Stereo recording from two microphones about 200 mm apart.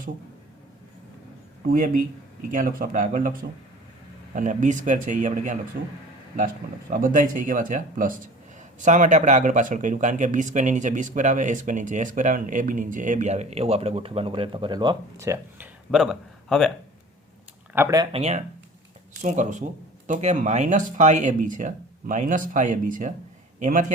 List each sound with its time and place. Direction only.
1.7 s speech: 45° right (ahead or behind)
4.4 s speech: 40° right (ahead or behind)
6.9 s speech: 40° right (ahead or behind); by 16.7 s 5° left (ahead or behind)
17.7 s speech: 15° right (ahead or behind)
18.1 s a man's voice: 30° right (ahead or behind)